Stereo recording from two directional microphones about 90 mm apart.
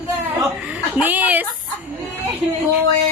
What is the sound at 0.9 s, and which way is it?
Speech, 20° right (ahead or behind).